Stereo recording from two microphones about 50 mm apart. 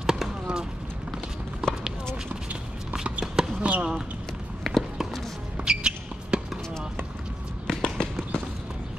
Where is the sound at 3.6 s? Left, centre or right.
Right.